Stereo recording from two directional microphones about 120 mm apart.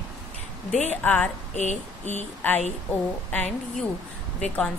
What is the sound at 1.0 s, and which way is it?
Speech, 15° left (ahead or behind).